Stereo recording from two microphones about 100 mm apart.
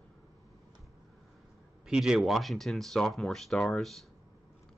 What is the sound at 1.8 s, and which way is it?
Speech, 5° right (ahead or behind).